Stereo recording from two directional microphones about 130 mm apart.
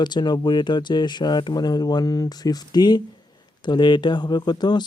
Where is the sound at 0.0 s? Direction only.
35° left (ahead or behind).